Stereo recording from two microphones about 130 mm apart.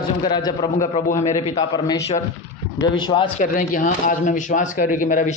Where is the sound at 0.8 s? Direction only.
90° left.